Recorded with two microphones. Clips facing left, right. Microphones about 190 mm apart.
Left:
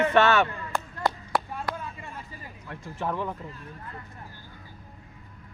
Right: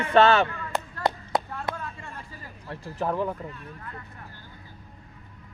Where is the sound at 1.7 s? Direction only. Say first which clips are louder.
Even; 15° left (ahead or behind).